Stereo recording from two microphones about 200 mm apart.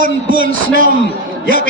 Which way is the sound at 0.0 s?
45° right (ahead or behind).